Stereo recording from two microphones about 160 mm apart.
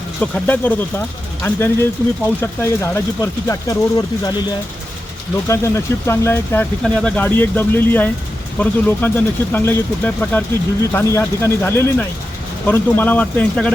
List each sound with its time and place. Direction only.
0.2 s speech: 10° left (ahead or behind)
5.5 s speech: 15° left (ahead or behind)